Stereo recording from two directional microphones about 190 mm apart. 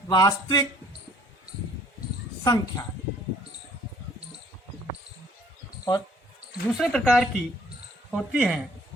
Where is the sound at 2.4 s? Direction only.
20° left (ahead or behind).